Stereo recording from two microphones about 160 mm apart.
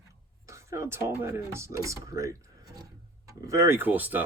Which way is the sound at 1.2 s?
15° right (ahead or behind).